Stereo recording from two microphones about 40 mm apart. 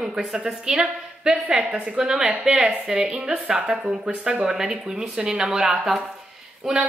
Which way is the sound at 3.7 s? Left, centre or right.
Right.